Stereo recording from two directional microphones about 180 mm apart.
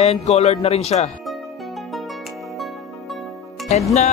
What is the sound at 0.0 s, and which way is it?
Speech, 35° left (ahead or behind).